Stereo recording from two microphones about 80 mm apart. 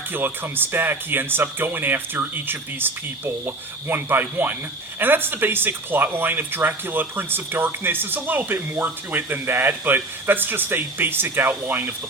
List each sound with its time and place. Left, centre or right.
0.1 s speech: right